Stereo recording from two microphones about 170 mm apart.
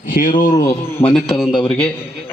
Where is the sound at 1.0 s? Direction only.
35° left (ahead or behind).